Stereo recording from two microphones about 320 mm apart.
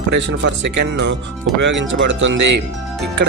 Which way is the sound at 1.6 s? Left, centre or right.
Right.